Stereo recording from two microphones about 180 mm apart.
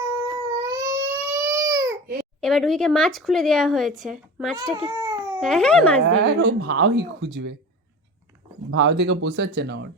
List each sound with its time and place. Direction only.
0.2 s crying: 15° right (ahead or behind)
2.4 s speech: centre (ahead or behind)
4.9 s baby cry: 20° right (ahead or behind)
5.4 s speech: 5° left (ahead or behind)
6.1 s speech: 70° right (ahead or behind)
8.7 s speech: 80° right